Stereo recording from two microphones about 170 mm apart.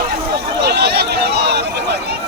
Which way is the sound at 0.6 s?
75° right (ahead or behind).